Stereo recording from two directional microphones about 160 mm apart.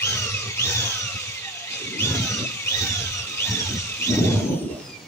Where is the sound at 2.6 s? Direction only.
15° left (ahead or behind).